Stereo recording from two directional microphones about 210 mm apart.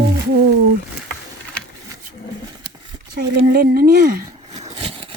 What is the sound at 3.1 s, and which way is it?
Speech, 45° right (ahead or behind).